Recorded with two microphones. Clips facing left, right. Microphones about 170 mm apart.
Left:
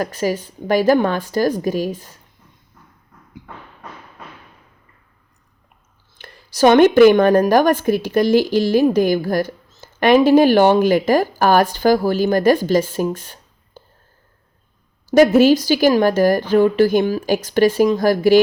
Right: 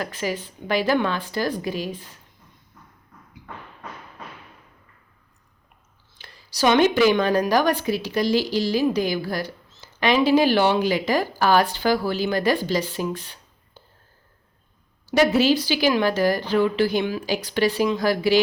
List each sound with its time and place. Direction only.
0.0 s a woman's voice: 40° left (ahead or behind)
6.1 s a woman's voice: 55° left (ahead or behind)
15.0 s a woman's voice: 45° left (ahead or behind)